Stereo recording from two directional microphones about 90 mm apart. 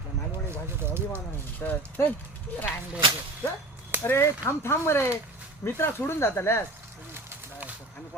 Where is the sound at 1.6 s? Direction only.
20° left (ahead or behind).